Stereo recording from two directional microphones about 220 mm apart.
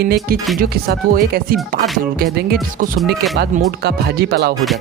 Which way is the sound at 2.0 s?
45° right (ahead or behind).